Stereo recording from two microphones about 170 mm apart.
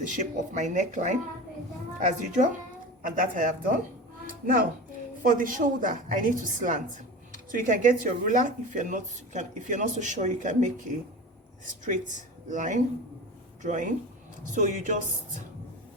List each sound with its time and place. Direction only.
0.1 s speech: 45° right (ahead or behind)
5.2 s speech: 50° right (ahead or behind)